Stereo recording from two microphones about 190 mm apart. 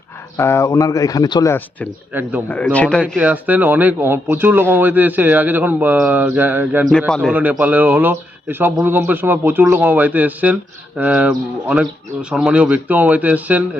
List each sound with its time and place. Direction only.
0.3 s speech: 15° left (ahead or behind)
2.1 s speech: 10° right (ahead or behind)
2.7 s speech: 5° left (ahead or behind)
3.2 s speech: 10° right (ahead or behind)
7.1 s speech: centre (ahead or behind)
7.6 s speech: 10° right (ahead or behind)